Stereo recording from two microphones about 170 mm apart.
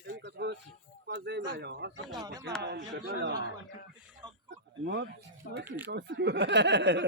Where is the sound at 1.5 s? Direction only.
90° right.